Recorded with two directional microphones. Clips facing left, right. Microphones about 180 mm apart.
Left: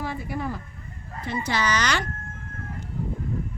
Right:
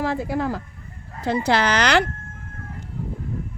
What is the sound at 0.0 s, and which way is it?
Speech, 90° right.